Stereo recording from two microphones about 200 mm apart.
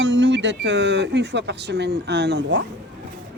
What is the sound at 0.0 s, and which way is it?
Speech, 65° right (ahead or behind).